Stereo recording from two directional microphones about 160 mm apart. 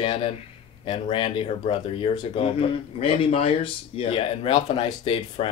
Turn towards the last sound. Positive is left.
turn(degrees=35)  # may be behind; listen again after turning